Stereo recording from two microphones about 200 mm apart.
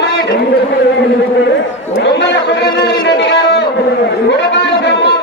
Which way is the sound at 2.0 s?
60° left (ahead or behind).